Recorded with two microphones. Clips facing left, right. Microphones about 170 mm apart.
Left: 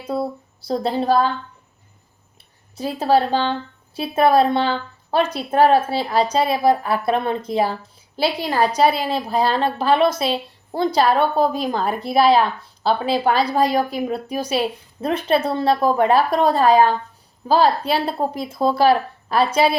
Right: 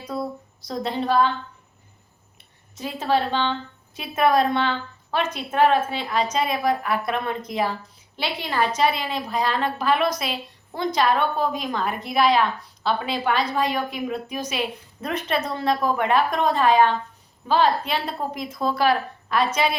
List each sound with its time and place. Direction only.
0.1 s a woman's voice: 30° left (ahead or behind)
2.7 s a woman's voice: 35° left (ahead or behind)